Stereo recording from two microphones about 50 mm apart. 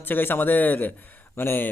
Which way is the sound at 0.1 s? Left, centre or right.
Left.